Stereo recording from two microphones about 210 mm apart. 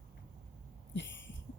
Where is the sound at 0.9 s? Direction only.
60° left (ahead or behind).